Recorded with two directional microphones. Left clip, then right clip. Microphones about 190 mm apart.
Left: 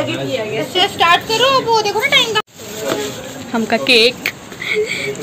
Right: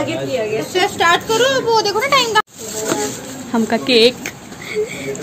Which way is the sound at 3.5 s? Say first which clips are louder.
Left 2 dB; 15° right (ahead or behind).